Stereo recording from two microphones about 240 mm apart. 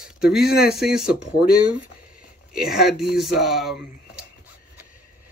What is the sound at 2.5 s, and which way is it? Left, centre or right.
Speech, centre.